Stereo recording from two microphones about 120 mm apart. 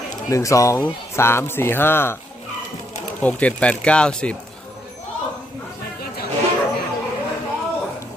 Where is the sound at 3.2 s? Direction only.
10° left (ahead or behind).